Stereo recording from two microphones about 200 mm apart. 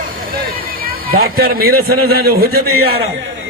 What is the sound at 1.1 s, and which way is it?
A man's voice, 50° right (ahead or behind).